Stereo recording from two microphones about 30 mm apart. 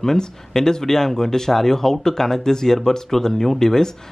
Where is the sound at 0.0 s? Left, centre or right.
Centre.